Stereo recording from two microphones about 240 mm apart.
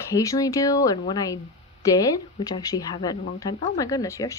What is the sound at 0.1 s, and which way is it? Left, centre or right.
Speech, centre.